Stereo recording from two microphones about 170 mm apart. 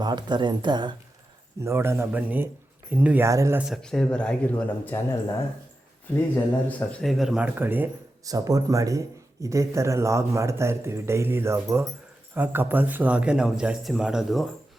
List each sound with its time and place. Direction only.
0.0 s speech: 25° right (ahead or behind)
1.6 s speech: 15° right (ahead or behind)
3.6 s a man's voice: centre (ahead or behind)
6.3 s speech: 10° left (ahead or behind)